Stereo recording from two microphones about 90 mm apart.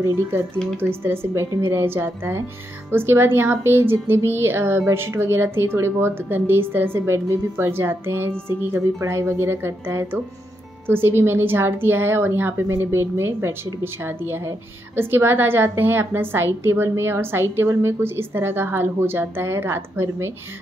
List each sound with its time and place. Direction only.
0.0 s a woman's voice: 30° right (ahead or behind)